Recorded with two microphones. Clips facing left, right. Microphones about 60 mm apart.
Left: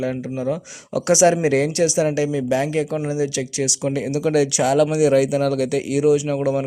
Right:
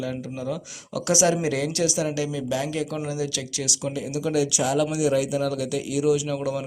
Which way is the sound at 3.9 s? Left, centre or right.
Left.